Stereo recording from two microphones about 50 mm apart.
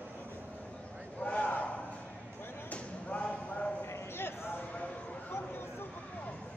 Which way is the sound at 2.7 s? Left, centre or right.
Left.